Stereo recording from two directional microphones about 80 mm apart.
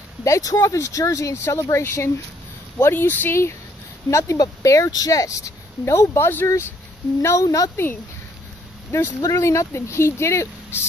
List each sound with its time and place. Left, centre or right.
0.2 s speech: left
2.9 s speech: left
4.1 s speech: left
7.4 s speech: left
7.7 s speech: left
9.2 s speech: left